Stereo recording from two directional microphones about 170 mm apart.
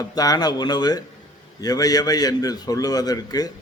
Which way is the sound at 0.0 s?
20° left (ahead or behind).